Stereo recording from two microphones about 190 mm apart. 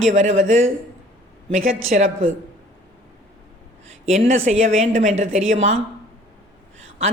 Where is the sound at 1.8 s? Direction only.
35° right (ahead or behind).